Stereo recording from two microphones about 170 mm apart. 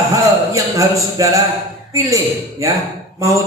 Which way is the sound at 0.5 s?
20° right (ahead or behind).